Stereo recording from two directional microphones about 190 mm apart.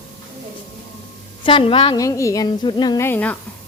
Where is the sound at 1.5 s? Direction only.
25° left (ahead or behind).